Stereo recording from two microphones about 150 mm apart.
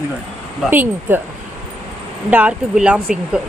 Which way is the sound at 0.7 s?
15° right (ahead or behind).